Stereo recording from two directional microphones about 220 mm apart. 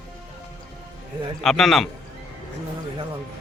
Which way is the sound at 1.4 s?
Centre (ahead or behind).